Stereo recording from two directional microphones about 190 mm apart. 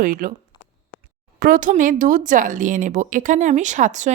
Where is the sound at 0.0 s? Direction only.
45° right (ahead or behind).